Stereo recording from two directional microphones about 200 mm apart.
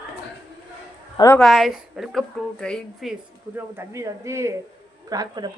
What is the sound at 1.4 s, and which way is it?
A woman's voice, centre (ahead or behind).